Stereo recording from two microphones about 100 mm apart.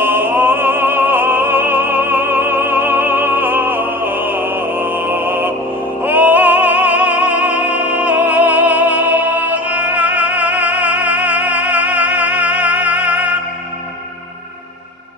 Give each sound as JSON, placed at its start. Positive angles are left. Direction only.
{"t": 0.0, "sound": "music", "side_deg": -20}